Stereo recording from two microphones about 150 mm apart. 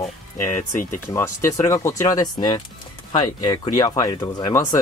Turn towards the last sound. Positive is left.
turn(degrees=25)  # may be behind; listen again after turning